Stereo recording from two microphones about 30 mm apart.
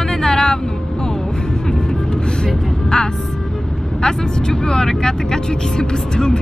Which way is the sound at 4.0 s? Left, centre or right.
Left.